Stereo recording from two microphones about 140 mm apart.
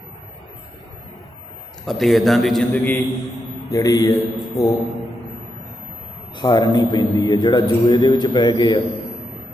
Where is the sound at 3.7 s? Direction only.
25° left (ahead or behind).